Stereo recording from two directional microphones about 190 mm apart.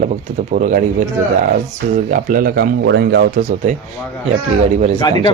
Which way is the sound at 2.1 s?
50° right (ahead or behind).